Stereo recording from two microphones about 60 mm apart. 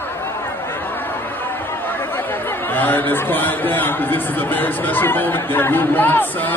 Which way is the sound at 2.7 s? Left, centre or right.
Left.